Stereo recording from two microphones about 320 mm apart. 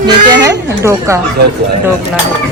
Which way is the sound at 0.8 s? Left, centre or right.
Centre.